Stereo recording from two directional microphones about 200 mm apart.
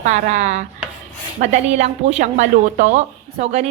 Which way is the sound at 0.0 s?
35° right (ahead or behind).